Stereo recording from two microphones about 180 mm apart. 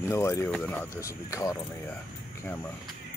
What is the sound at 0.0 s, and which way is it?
Speech, 15° left (ahead or behind).